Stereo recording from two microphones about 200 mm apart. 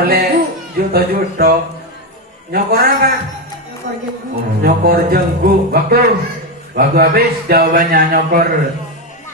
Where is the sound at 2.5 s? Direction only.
50° right (ahead or behind).